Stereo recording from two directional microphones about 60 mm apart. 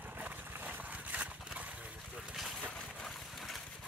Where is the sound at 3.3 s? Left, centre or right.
Centre.